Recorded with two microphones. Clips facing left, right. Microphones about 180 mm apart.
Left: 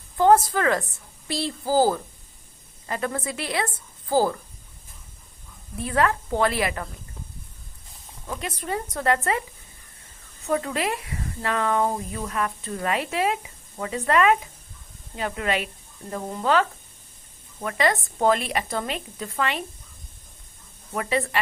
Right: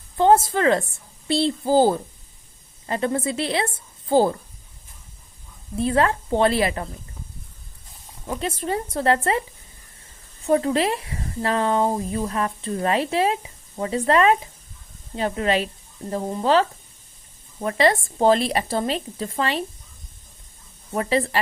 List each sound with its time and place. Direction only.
0.2 s a woman's voice: 25° right (ahead or behind)
5.7 s a woman's voice: 30° right (ahead or behind)
8.4 s a woman's voice: 25° right (ahead or behind)
10.5 s a woman's voice: 30° right (ahead or behind)
20.9 s speech: 30° right (ahead or behind)